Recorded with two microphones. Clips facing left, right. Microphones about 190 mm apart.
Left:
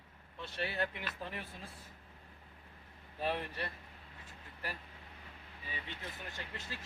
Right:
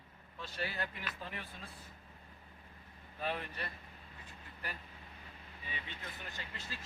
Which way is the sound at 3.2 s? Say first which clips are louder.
Left 3 dB; 30° left (ahead or behind).